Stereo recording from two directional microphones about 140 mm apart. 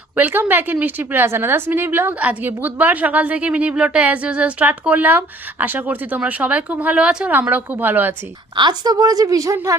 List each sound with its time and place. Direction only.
0.2 s a woman's voice: 15° right (ahead or behind)
8.5 s a woman's voice: 30° right (ahead or behind)